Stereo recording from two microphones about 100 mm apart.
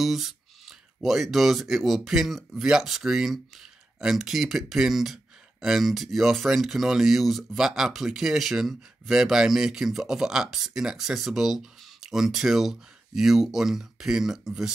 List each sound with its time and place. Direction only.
0.0 s speech: 5° right (ahead or behind)